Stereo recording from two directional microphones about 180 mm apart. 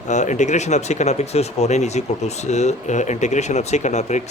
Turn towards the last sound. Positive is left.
turn(degrees=40)  # may be behind; listen again after turning